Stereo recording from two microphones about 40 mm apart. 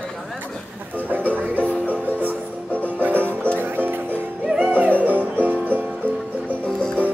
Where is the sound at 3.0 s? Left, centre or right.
Right.